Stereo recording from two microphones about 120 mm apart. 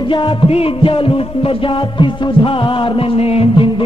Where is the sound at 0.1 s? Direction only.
40° left (ahead or behind).